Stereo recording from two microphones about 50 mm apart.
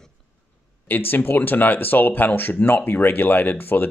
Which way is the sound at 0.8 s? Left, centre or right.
Left.